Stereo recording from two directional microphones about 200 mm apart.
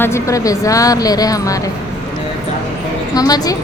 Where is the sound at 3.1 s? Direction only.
20° left (ahead or behind).